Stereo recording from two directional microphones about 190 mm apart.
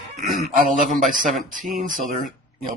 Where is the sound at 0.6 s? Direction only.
45° right (ahead or behind).